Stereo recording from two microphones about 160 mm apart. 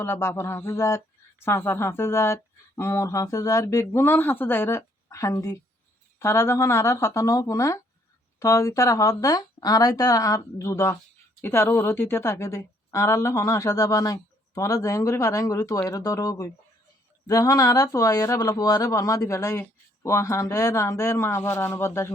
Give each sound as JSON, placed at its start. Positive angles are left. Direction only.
{"t": 0.0, "sound": "speech", "side_deg": 15}